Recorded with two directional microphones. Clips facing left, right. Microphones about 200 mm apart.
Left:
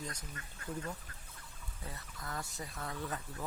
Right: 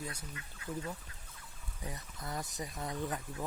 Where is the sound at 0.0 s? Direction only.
10° right (ahead or behind).